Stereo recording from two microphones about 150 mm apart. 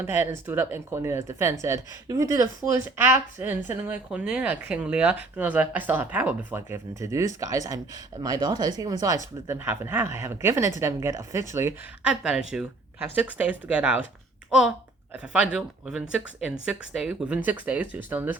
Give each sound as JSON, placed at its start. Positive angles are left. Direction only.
{"t": 0.0, "sound": "a woman's voice", "side_deg": -15}
{"t": 12.2, "sound": "a woman's voice", "side_deg": -5}
{"t": 15.1, "sound": "a woman's voice", "side_deg": -10}